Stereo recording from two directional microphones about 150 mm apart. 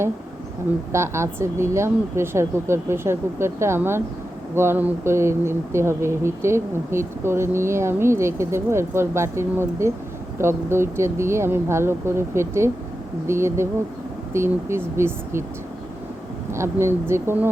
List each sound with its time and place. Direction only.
0.9 s speech: 20° right (ahead or behind)
16.5 s speech: 15° right (ahead or behind)